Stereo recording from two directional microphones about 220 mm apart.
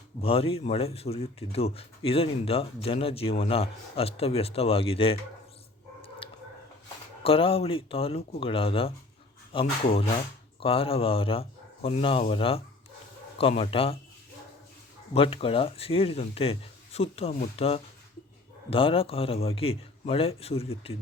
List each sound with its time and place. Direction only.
0.2 s speech: 25° left (ahead or behind)
7.3 s speech: 25° left (ahead or behind)
15.1 s speech: 25° left (ahead or behind)